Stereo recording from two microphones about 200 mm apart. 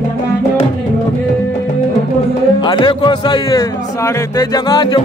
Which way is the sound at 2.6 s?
20° left (ahead or behind).